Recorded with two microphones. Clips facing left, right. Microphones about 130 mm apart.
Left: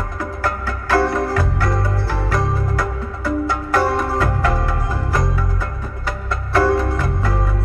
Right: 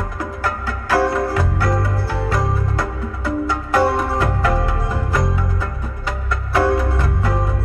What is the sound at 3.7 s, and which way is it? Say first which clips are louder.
Music: right 2 dB; 20° right (ahead or behind).